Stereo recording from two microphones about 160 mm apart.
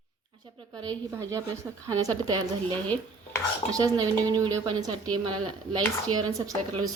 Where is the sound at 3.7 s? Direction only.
25° right (ahead or behind).